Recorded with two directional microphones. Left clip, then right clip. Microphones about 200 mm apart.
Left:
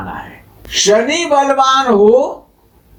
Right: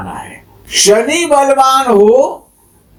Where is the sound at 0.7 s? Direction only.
40° right (ahead or behind).